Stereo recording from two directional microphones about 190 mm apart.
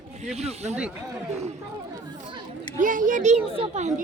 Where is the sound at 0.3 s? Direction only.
35° right (ahead or behind).